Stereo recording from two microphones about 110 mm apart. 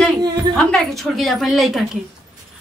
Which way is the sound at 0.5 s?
5° left (ahead or behind).